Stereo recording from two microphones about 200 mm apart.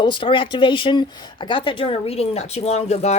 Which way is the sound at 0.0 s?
25° left (ahead or behind).